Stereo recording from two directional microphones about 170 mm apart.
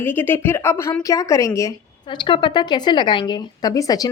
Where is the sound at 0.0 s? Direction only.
10° left (ahead or behind).